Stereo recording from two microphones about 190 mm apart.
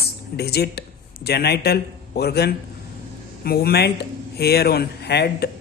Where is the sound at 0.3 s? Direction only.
55° left (ahead or behind).